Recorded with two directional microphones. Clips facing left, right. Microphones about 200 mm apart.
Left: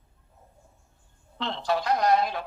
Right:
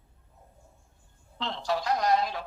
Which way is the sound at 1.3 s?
60° left (ahead or behind).